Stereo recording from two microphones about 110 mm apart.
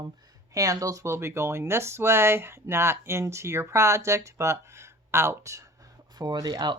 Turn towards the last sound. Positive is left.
turn(degrees=-40)  # may be behind; listen again after turning